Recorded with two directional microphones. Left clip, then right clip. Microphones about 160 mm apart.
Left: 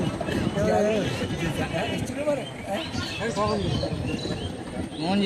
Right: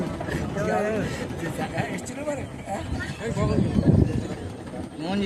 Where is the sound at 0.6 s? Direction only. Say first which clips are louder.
Left 2 dB; 35° left (ahead or behind).